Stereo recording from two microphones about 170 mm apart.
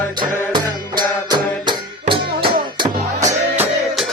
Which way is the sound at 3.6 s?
Centre (ahead or behind).